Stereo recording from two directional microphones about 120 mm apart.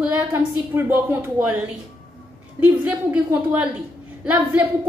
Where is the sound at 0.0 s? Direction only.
15° right (ahead or behind).